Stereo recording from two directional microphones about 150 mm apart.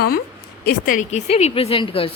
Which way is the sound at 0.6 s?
70° left (ahead or behind).